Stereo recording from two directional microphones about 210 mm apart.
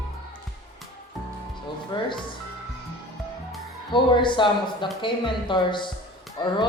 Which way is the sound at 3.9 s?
20° left (ahead or behind).